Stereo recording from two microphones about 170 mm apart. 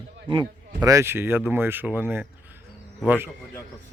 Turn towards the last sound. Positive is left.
turn(degrees=-10)  # may be behind; listen again after turning